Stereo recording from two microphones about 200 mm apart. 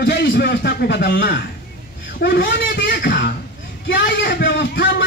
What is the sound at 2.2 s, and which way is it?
A man's voice, 55° left (ahead or behind).